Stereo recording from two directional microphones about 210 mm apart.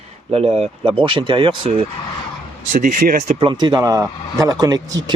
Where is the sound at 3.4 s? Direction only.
20° right (ahead or behind).